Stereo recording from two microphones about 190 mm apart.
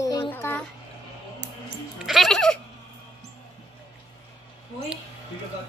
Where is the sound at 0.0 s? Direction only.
20° left (ahead or behind).